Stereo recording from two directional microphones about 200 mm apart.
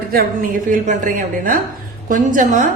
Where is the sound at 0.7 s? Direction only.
40° right (ahead or behind).